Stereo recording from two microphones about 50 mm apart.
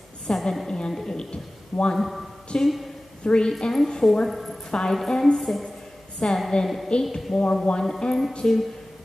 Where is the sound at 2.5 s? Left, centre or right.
Centre.